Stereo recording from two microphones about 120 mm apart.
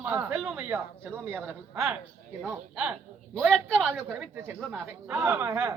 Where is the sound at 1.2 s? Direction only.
15° right (ahead or behind).